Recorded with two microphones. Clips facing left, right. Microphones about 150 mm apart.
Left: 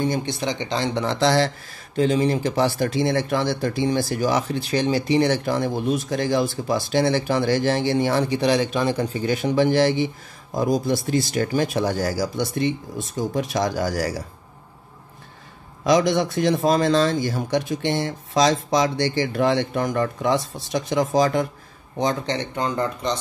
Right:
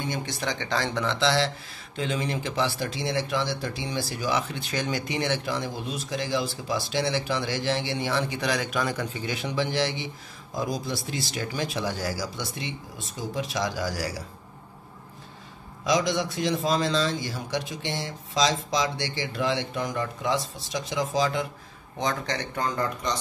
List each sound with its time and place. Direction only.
0.2 s speech: 20° left (ahead or behind)
1.0 s speech: 45° left (ahead or behind)
15.8 s speech: 55° left (ahead or behind)
21.9 s speech: 30° left (ahead or behind)